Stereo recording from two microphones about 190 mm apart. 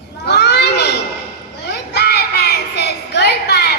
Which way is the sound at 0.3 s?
60° left (ahead or behind).